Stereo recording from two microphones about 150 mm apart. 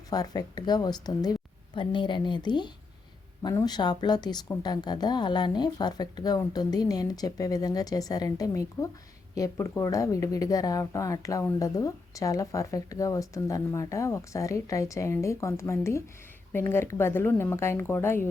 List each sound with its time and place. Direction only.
0.1 s a woman's voice: 25° left (ahead or behind)